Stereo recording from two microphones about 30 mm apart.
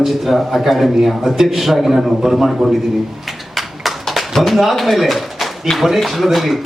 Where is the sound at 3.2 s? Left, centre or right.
Centre.